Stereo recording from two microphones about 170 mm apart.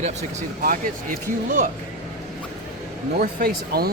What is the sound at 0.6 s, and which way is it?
Speech, 55° right (ahead or behind).